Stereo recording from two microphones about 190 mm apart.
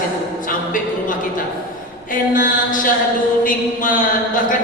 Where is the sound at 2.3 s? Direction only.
45° left (ahead or behind).